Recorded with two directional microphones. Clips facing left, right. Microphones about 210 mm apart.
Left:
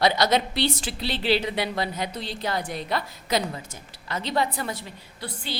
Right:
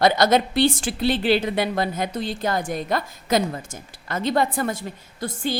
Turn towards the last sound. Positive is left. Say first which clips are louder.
# right 8 dB
turn(degrees=-45)  # may be behind; listen again after turning